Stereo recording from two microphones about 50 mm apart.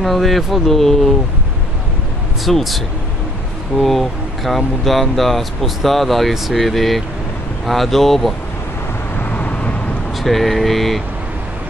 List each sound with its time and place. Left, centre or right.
0.0 s speech: centre
2.4 s speech: centre
3.8 s speech: centre
9.1 s vehicle: left
10.2 s speech: centre